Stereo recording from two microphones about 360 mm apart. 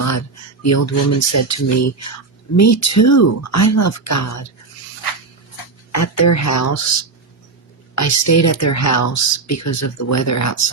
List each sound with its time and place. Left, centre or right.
0.0 s a sound: left
1.0 s speech: left
5.9 s speech: left
7.9 s speech: left